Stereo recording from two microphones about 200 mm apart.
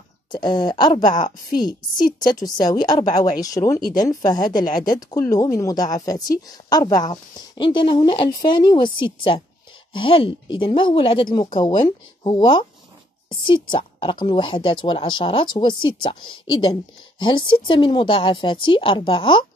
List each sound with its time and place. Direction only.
0.3 s a woman's voice: 20° left (ahead or behind)